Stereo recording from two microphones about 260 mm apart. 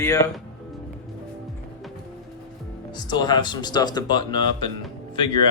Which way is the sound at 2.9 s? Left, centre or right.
Centre.